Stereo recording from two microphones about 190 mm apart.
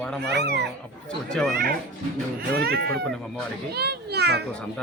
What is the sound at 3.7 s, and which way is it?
Children playing, 60° right (ahead or behind).